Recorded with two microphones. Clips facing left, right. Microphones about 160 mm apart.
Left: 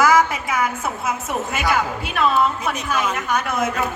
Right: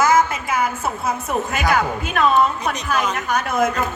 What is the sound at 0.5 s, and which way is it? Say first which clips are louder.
Speech: right 1 dB; 30° right (ahead or behind).